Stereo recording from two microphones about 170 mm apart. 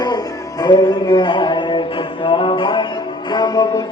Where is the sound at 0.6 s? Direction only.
25° left (ahead or behind).